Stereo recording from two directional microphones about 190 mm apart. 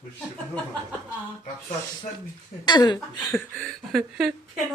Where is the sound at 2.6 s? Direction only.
25° left (ahead or behind).